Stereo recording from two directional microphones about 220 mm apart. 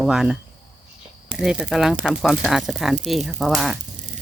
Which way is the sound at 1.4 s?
5° right (ahead or behind).